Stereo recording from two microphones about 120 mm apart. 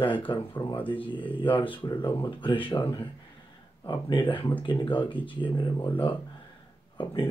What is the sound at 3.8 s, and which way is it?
Speech, 40° left (ahead or behind).